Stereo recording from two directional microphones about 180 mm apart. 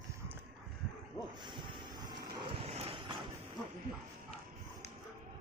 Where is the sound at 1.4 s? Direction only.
25° right (ahead or behind).